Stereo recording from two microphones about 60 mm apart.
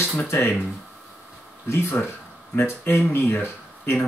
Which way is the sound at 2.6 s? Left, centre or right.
Left.